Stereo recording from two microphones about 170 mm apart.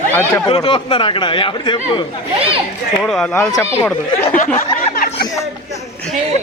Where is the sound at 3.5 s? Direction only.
20° left (ahead or behind).